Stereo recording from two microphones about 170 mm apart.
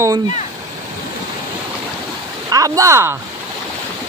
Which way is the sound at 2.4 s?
20° right (ahead or behind).